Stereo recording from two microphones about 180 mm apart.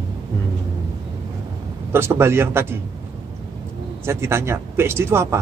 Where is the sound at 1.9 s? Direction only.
15° right (ahead or behind).